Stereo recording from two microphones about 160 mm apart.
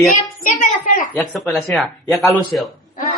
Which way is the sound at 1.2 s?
Centre (ahead or behind).